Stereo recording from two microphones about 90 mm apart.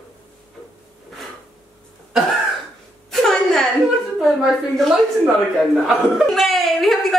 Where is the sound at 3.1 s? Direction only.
5° left (ahead or behind).